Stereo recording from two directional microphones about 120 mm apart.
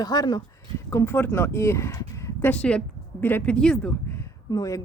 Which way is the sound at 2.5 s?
10° left (ahead or behind).